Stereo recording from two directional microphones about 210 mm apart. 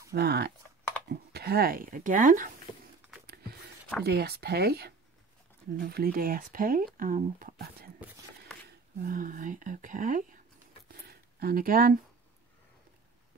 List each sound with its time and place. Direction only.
0.1 s speech: 50° right (ahead or behind)
4.0 s speech: 50° right (ahead or behind)
10.9 s a sound: 50° right (ahead or behind)